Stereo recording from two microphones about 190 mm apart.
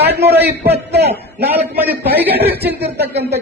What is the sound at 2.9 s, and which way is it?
Speech, 60° right (ahead or behind).